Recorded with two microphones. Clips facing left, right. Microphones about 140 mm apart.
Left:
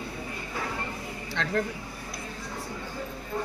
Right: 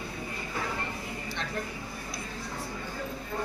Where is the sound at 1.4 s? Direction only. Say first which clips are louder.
Left 8 dB; 90° left.